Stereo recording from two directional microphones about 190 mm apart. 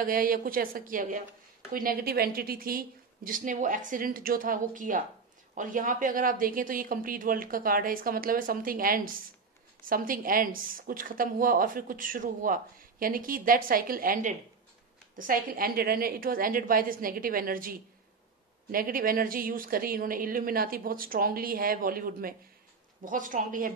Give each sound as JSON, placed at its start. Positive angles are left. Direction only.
{"t": 0.0, "sound": "a woman's voice", "side_deg": -50}